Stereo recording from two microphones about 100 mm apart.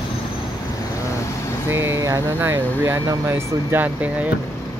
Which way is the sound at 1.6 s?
25° right (ahead or behind).